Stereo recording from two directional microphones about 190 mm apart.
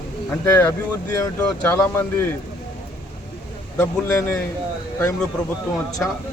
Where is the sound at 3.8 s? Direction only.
15° left (ahead or behind).